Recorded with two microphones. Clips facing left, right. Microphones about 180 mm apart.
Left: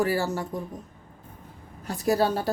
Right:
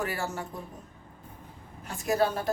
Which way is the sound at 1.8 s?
35° left (ahead or behind).